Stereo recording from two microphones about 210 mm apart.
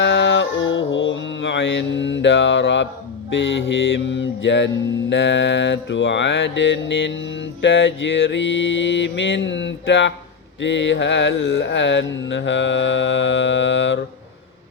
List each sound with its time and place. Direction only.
0.0 s mantra: 60° left (ahead or behind)